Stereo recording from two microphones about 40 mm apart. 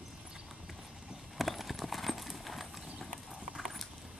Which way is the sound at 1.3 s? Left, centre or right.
Centre.